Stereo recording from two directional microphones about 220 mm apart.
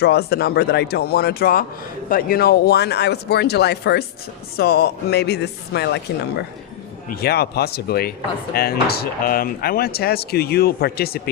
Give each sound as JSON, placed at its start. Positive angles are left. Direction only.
{"t": 0.0, "sound": "speech", "side_deg": 45}